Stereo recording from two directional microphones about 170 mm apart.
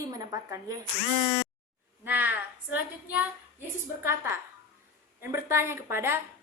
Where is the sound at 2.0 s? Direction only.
10° right (ahead or behind).